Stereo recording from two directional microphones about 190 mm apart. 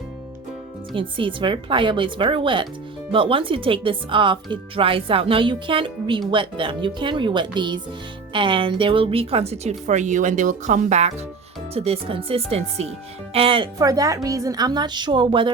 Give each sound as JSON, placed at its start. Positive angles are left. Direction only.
{"t": 0.9, "sound": "speech", "side_deg": -25}